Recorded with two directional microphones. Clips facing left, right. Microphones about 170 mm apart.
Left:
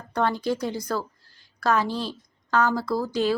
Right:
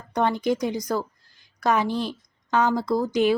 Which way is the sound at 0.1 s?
20° right (ahead or behind).